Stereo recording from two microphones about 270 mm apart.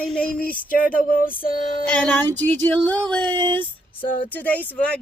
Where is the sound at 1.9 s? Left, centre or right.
Centre.